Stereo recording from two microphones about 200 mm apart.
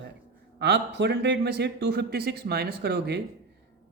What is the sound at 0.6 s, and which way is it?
Speech, 60° right (ahead or behind).